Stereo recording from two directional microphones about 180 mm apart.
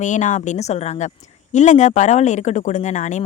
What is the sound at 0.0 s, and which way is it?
Speech, 45° left (ahead or behind).